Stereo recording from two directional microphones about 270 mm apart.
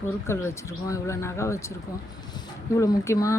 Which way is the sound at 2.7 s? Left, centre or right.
Centre.